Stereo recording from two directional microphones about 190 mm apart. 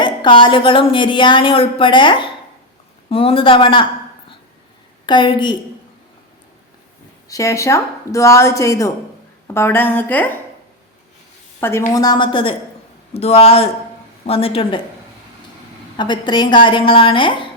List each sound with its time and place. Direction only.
0.0 s a woman's voice: 25° left (ahead or behind)
5.0 s a woman's voice: 25° left (ahead or behind)
7.3 s speech: 15° left (ahead or behind)
11.6 s a woman's voice: 15° left (ahead or behind)
16.0 s a woman's voice: 25° left (ahead or behind)